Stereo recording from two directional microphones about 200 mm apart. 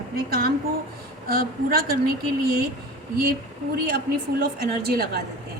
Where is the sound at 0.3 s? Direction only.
45° right (ahead or behind).